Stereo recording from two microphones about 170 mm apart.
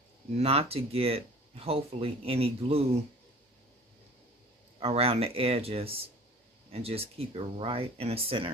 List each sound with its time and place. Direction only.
0.4 s speech: 35° right (ahead or behind)
4.7 s speech: 35° right (ahead or behind)